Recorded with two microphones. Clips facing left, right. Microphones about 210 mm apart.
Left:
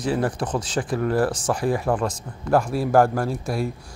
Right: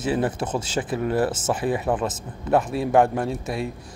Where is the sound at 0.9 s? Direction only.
25° right (ahead or behind).